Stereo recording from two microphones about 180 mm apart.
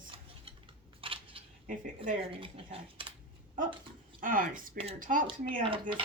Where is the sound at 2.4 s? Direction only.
30° right (ahead or behind).